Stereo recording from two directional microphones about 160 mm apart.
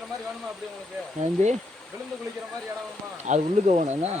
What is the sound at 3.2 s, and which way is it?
Speech, 45° right (ahead or behind).